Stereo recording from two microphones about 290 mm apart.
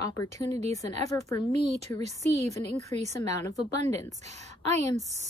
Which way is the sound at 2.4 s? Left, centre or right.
Right.